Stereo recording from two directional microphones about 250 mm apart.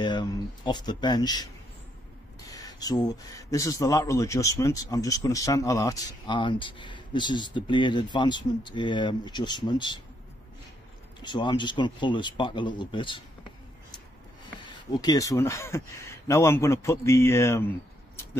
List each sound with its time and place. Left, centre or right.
0.0 s speech: centre
11.1 s speech: centre
14.6 s speech: centre